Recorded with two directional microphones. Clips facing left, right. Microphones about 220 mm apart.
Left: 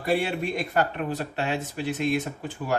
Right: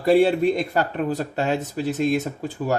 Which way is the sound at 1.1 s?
40° right (ahead or behind).